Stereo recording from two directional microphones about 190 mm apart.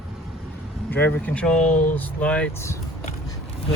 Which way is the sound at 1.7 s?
40° left (ahead or behind).